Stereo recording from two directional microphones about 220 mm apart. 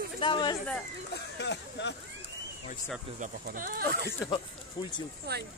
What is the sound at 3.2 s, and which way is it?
Speech, 40° right (ahead or behind).